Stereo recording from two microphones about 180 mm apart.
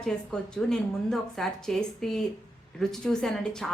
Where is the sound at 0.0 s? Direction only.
5° left (ahead or behind).